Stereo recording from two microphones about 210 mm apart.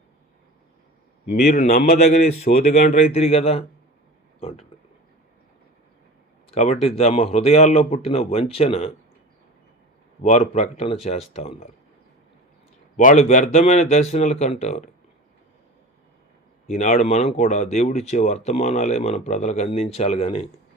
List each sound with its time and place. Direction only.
1.5 s speech: 30° left (ahead or behind)
6.5 s speech: 30° left (ahead or behind)
10.2 s speech: 35° left (ahead or behind)
13.0 s speech: 35° left (ahead or behind)
16.6 s speech: 35° left (ahead or behind)